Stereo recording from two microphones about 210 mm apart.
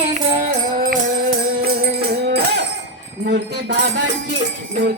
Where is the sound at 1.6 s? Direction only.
50° right (ahead or behind).